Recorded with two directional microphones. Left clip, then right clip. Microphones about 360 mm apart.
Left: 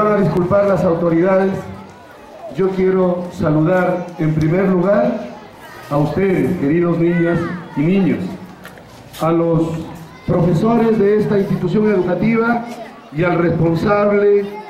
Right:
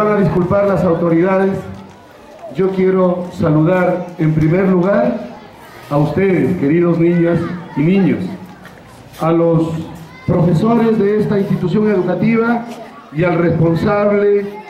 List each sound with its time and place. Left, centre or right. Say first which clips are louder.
0.0 s a man's voice: right 1 dB; centre
6.1 s a man's voice: right 2 dB; centre